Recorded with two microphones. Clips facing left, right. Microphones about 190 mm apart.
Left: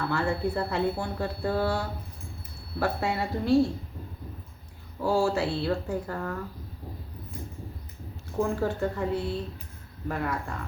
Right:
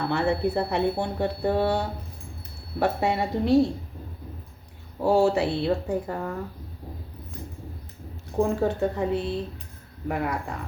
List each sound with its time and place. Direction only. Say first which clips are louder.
0.0 s speech: right 3 dB; 20° right (ahead or behind)
4.9 s speech: right 4 dB; 20° right (ahead or behind)
8.4 s speech: right 4 dB; 20° right (ahead or behind)